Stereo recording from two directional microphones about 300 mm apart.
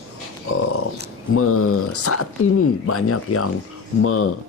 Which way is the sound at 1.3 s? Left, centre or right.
Left.